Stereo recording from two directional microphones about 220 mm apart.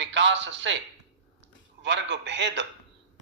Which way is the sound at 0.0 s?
55° right (ahead or behind).